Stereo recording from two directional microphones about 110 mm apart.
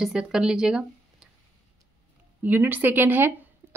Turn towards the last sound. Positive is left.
turn(degrees=-20)  # may be behind; listen again after turning